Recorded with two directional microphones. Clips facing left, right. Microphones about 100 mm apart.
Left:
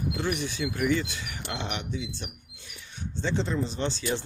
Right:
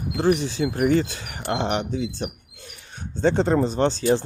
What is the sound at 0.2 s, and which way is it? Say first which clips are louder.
Speech: right 13 dB; 35° right (ahead or behind).